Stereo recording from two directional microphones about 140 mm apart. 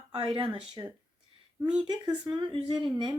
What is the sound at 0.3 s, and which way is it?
Speech, 40° right (ahead or behind).